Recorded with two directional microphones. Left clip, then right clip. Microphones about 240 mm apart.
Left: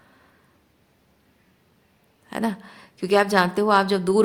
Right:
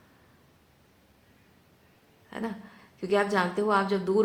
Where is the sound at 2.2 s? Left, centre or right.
Left.